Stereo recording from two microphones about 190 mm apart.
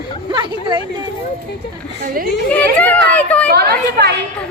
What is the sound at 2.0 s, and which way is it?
Speech, 50° right (ahead or behind).